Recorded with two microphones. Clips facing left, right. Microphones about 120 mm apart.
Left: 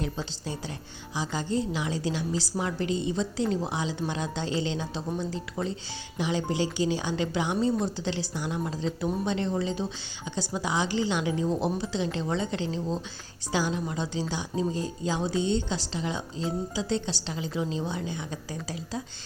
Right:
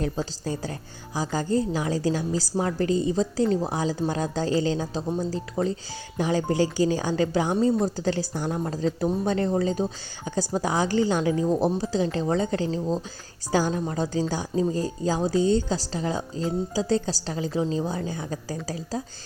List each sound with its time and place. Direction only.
0.4 s a woman's voice: 40° right (ahead or behind)